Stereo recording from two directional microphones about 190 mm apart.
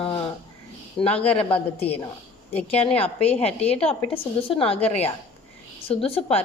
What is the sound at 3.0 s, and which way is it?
A woman's voice, 30° left (ahead or behind).